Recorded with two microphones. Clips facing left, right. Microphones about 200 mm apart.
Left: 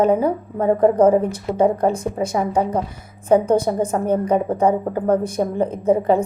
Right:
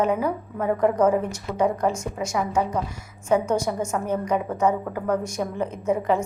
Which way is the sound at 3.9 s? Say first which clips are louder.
Left 6 dB; 30° left (ahead or behind).